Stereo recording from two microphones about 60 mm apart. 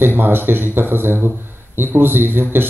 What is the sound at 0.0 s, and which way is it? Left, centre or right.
A man's voice, right.